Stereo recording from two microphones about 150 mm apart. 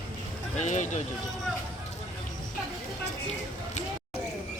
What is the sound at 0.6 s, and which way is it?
Speech, 55° left (ahead or behind).